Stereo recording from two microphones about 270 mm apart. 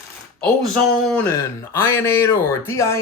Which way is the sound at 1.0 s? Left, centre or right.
Centre.